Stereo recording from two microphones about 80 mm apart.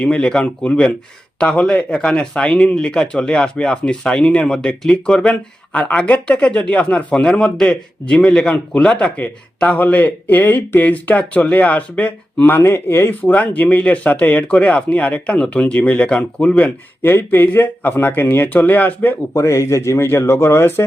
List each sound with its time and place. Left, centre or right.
0.0 s speech: centre
12.5 s speech: left
17.0 s speech: left
19.3 s speech: left